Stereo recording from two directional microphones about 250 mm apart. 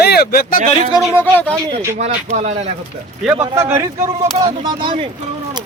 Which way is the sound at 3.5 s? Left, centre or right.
Centre.